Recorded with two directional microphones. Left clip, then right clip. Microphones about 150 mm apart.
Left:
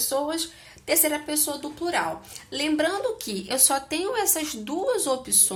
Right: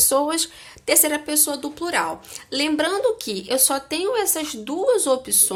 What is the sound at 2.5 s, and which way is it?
Speech, 50° right (ahead or behind).